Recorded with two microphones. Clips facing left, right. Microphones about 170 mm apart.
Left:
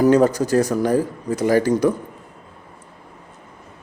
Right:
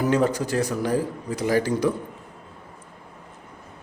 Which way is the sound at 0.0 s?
40° left (ahead or behind).